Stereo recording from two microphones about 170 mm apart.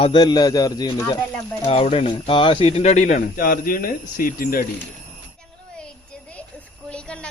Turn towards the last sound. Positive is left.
turn(degrees=5)  # may be behind; listen again after turning